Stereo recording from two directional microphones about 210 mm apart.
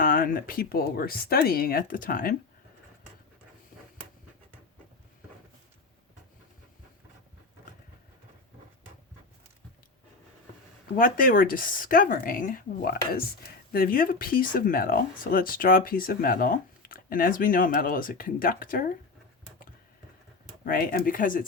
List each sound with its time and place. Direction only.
0.0 s speech: 40° left (ahead or behind)
10.9 s speech: 40° left (ahead or behind)
20.7 s speech: 45° left (ahead or behind)